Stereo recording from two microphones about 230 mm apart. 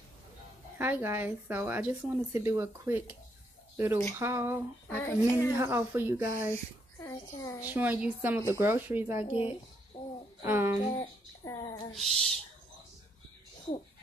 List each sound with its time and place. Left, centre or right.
0.7 s speech: centre
4.8 s a child's voice: centre
5.6 s speech: centre
7.1 s a child's voice: centre
7.7 s speech: centre
9.2 s speech: left
9.9 s a sound: left
10.4 s speech: centre
11.0 s a woman's voice: centre
11.9 s owl: centre